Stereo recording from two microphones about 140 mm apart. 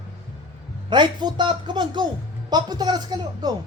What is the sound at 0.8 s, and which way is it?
Speech, 35° right (ahead or behind).